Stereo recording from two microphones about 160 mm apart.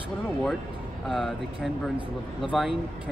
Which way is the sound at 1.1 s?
Centre (ahead or behind).